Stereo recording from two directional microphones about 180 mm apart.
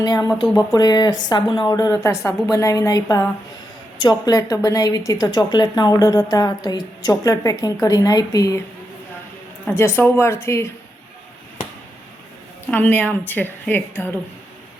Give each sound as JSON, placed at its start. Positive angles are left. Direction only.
{"t": 0.0, "sound": "speech", "side_deg": 20}
{"t": 9.6, "sound": "a woman's voice", "side_deg": 15}
{"t": 12.7, "sound": "a woman's voice", "side_deg": 10}